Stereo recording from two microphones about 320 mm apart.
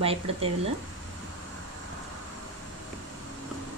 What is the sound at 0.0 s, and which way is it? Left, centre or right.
Speech, centre.